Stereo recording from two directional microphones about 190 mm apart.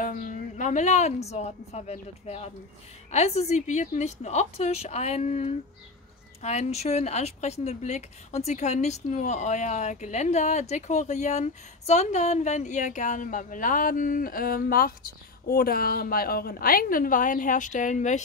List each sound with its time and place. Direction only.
0.0 s a woman's voice: 40° left (ahead or behind)